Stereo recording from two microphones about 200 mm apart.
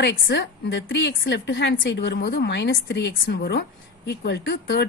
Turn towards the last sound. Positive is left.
turn(degrees=55)  # may be behind; listen again after turning